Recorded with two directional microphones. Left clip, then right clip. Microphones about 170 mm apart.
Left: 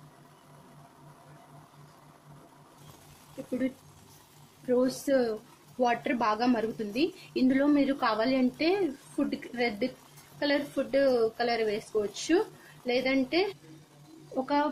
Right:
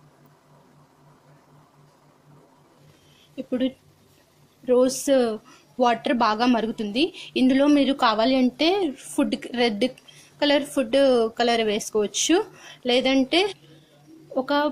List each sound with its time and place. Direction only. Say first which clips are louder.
4.6 s a woman's voice: right 8 dB; 25° right (ahead or behind)
14.4 s speech: right 5 dB; 15° right (ahead or behind)